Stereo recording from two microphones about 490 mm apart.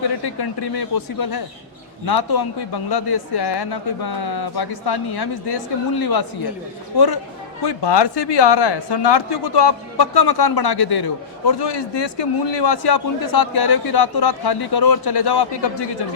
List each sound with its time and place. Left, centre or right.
0.2 s speech: left